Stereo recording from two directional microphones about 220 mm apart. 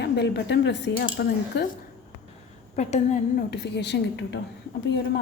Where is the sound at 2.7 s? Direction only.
30° left (ahead or behind).